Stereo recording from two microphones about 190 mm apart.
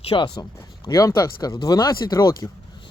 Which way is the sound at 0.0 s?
25° left (ahead or behind).